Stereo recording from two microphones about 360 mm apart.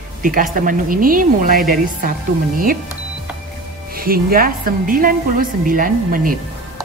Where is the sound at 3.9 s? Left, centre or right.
Right.